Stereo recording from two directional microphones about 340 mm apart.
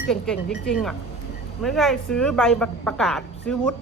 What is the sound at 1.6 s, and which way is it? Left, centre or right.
A woman's voice, centre.